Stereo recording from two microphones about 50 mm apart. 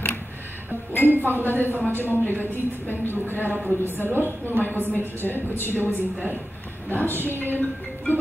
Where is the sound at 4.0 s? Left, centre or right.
Right.